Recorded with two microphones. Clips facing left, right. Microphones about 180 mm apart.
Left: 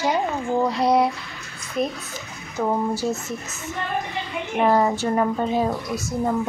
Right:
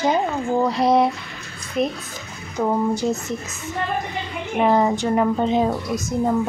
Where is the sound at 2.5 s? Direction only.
15° right (ahead or behind).